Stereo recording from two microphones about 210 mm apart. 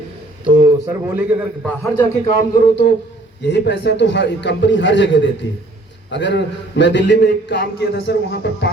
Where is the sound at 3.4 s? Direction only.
55° left (ahead or behind).